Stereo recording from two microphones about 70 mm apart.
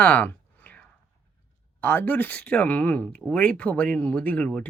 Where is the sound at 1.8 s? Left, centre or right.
Left.